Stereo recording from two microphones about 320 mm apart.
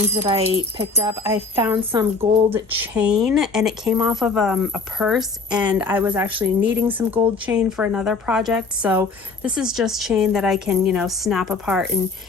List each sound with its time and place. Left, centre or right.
0.2 s a woman's voice: centre